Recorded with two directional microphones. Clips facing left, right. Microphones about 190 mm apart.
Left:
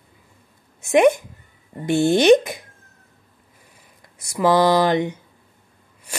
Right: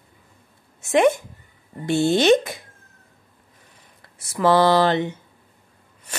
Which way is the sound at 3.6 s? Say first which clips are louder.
Left 1 dB; 10° left (ahead or behind).